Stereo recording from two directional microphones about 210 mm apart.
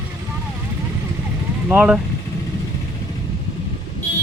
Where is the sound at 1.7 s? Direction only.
5° right (ahead or behind).